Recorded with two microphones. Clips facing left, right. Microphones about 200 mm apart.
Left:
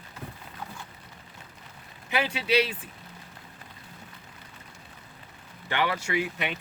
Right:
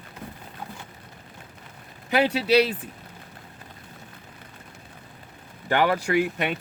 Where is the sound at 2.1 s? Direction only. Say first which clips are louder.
Right 6 dB; 40° right (ahead or behind).